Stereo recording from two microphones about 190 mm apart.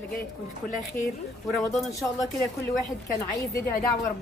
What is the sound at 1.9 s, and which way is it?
Speech, 15° left (ahead or behind).